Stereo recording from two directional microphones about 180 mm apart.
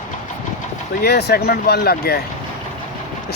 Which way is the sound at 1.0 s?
65° left (ahead or behind).